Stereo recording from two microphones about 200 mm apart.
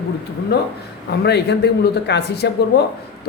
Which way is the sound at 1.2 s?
55° left (ahead or behind).